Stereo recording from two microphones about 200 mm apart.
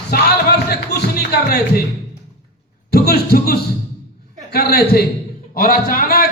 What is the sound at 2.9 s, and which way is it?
Speech, 50° left (ahead or behind).